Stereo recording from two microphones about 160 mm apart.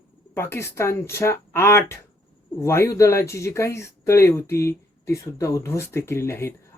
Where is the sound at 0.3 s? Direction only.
15° left (ahead or behind).